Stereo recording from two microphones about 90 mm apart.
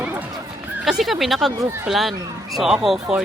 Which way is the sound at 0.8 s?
Centre (ahead or behind).